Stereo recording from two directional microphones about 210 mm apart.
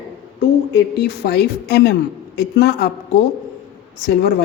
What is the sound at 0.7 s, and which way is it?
A woman's voice, 50° left (ahead or behind).